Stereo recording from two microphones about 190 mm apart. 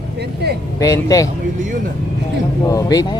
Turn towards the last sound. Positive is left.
turn(degrees=20)  # may be behind; listen again after turning